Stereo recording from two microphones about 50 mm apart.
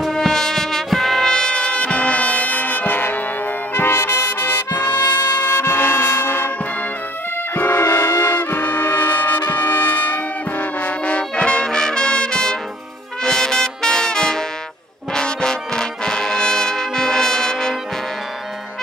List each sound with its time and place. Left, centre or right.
0.1 s music: centre
1.2 s music: centre; by 3.2 s left
3.9 s music: left
4.3 s music: left
5.5 s music: left
7.5 s music: left; by 14.4 s centre
15.1 s brass instrument: centre